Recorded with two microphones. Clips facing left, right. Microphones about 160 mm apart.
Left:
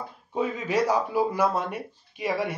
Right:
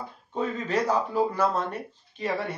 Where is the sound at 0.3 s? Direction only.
10° left (ahead or behind).